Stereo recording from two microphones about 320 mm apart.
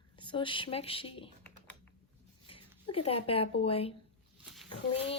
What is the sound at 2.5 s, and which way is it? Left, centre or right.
Speech, centre.